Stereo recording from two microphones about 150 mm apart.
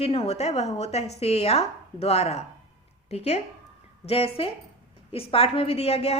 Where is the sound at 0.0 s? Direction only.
40° left (ahead or behind).